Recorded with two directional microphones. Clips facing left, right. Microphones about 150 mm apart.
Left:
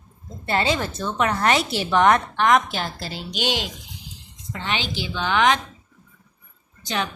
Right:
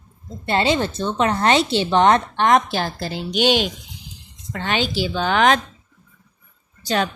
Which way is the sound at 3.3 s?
65° right (ahead or behind).